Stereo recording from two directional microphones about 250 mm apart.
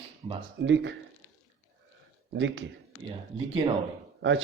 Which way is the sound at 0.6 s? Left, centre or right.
Right.